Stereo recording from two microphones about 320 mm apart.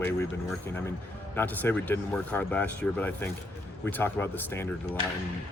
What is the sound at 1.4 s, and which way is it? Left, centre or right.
Speech, centre.